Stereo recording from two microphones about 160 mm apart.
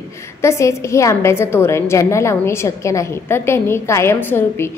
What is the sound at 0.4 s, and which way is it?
A woman's voice, 20° left (ahead or behind).